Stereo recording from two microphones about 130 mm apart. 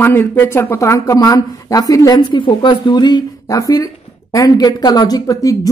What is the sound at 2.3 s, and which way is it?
Speech, 40° left (ahead or behind).